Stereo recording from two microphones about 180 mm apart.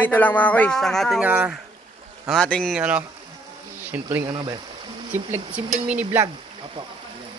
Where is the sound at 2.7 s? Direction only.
5° right (ahead or behind).